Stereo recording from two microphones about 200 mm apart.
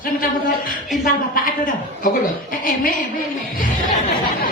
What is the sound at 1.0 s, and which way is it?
Speech, 45° left (ahead or behind).